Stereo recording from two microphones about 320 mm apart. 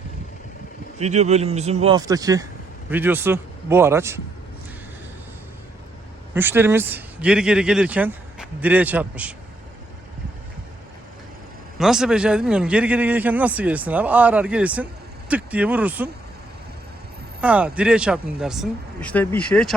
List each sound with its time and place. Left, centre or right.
0.9 s a man's voice: right
6.3 s a man's voice: centre
11.8 s a man's voice: centre
17.4 s a man's voice: centre